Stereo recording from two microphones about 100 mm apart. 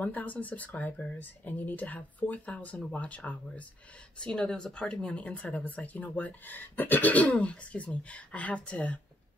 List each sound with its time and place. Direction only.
0.0 s speech: 15° left (ahead or behind)